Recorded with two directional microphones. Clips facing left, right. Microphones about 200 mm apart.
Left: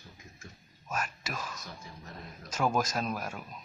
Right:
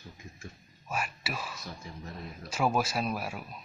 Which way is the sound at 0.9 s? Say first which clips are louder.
Right 1 dB; 10° right (ahead or behind).